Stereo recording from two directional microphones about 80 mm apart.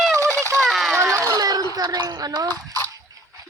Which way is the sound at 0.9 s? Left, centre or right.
Right.